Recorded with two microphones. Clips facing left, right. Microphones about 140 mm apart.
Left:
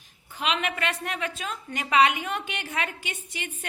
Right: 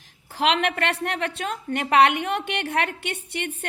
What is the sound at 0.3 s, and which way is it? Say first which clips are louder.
A woman's voice: right 6 dB; 75° right (ahead or behind).